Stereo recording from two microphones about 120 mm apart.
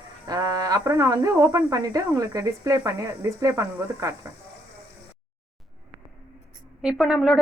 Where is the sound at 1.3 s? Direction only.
25° right (ahead or behind).